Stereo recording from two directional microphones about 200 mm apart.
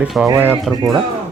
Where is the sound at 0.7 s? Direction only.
Centre (ahead or behind).